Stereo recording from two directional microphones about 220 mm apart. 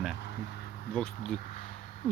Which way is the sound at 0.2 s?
50° left (ahead or behind).